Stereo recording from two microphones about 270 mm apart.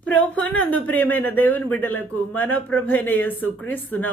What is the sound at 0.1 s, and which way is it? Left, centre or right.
Speech, centre.